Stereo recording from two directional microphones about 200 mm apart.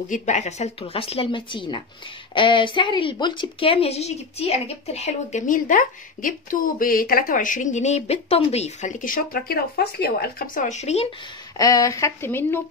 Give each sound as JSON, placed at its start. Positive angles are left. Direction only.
{"t": 0.1, "sound": "a woman's voice", "side_deg": 35}
{"t": 11.5, "sound": "a woman's voice", "side_deg": 15}